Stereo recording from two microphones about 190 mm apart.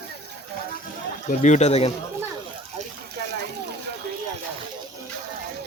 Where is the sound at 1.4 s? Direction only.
35° left (ahead or behind).